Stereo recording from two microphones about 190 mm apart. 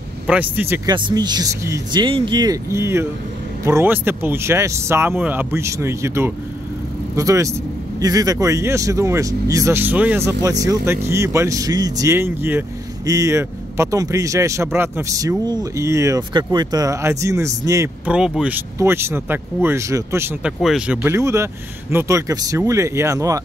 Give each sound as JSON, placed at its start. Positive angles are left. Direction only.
{"t": 0.3, "sound": "speech", "side_deg": -10}
{"t": 0.8, "sound": "speech", "side_deg": -25}
{"t": 18.1, "sound": "speech", "side_deg": -5}